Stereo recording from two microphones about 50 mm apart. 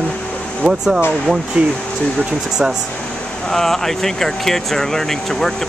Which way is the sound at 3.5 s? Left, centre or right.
Centre.